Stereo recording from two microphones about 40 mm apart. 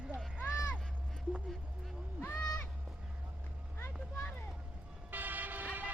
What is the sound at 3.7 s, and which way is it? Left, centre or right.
Vehicle, left.